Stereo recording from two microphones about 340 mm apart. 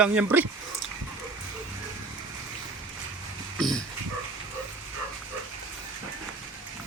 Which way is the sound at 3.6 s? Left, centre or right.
Centre.